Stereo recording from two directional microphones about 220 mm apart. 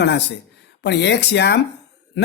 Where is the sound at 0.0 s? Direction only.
50° left (ahead or behind).